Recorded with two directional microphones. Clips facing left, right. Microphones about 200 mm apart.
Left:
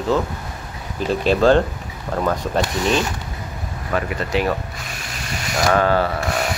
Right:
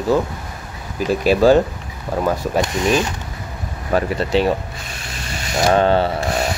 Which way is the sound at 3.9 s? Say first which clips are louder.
Right 4 dB; 30° right (ahead or behind).